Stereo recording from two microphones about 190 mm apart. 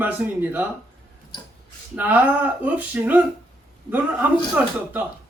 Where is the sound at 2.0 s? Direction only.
10° right (ahead or behind).